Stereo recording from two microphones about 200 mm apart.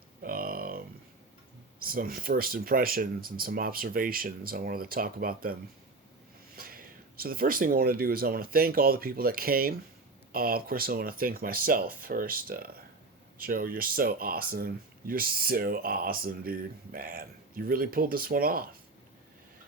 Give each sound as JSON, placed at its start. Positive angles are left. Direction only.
{"t": 0.2, "sound": "a sound", "side_deg": -45}
{"t": 1.8, "sound": "speech", "side_deg": -45}
{"t": 6.6, "sound": "speech", "side_deg": -45}